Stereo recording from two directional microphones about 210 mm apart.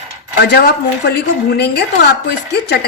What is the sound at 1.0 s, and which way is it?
Speech, 50° left (ahead or behind).